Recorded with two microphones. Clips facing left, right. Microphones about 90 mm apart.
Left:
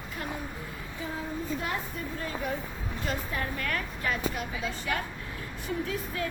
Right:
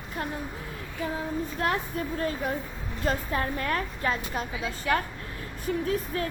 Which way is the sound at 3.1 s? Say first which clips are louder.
Right 6 dB; 35° right (ahead or behind).